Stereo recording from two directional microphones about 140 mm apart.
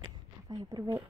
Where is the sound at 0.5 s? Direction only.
30° right (ahead or behind).